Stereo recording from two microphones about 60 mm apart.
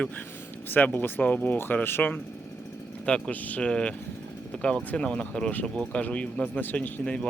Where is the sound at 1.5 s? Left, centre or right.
Left.